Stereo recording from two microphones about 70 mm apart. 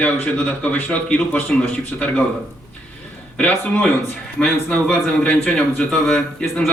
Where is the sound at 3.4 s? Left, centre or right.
Left.